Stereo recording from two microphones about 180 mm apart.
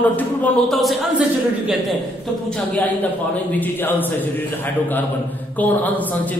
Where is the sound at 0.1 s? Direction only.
5° left (ahead or behind).